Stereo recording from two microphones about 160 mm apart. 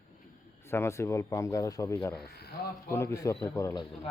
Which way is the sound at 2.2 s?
75° left (ahead or behind).